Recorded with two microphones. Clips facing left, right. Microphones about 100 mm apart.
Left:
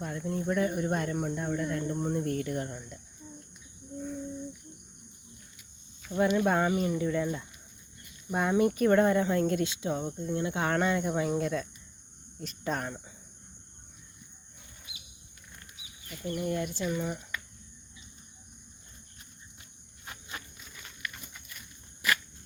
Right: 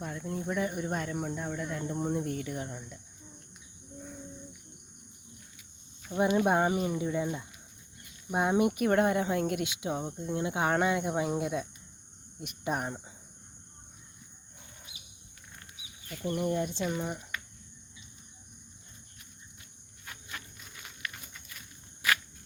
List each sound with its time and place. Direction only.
0.0 s speech: centre (ahead or behind)
6.1 s speech: 15° right (ahead or behind)
16.2 s speech: 30° right (ahead or behind)